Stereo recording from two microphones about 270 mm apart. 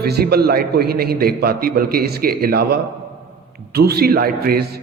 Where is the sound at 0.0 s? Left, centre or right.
Right.